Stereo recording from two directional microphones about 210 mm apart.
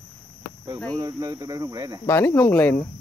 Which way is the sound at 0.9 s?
15° right (ahead or behind).